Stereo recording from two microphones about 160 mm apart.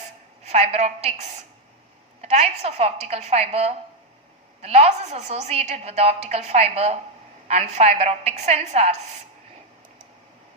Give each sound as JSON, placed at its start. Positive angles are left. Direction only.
{"t": 0.4, "sound": "a woman's voice", "side_deg": -40}